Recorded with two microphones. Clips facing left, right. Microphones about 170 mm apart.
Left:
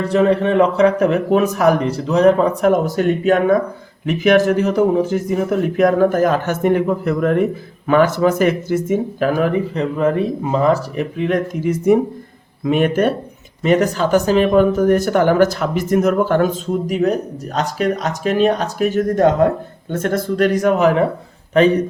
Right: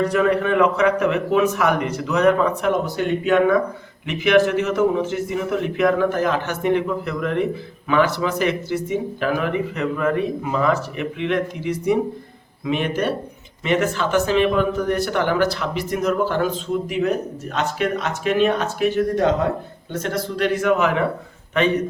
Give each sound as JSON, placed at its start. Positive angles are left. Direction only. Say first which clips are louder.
{"t": 0.0, "sound": "speech", "louder": "left 3 dB", "side_deg": 30}
{"t": 13.6, "sound": "speech", "louder": "left 5 dB", "side_deg": 40}